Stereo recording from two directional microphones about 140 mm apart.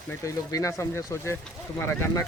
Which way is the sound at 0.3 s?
20° left (ahead or behind).